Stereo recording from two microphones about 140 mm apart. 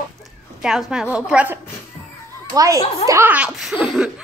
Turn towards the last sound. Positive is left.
turn(degrees=0)  # may be behind; listen again after turning